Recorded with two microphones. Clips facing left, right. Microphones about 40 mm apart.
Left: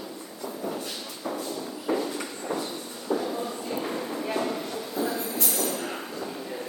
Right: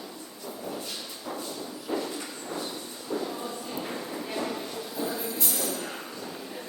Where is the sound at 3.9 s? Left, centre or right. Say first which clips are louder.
Left 4 dB; centre.